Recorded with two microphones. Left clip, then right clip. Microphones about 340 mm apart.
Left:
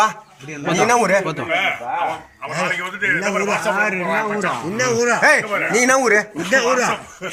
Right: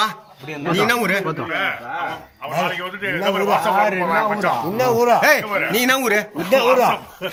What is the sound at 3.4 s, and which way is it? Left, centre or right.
Speech, right.